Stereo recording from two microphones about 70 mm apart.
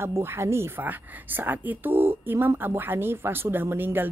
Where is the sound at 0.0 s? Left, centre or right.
Right.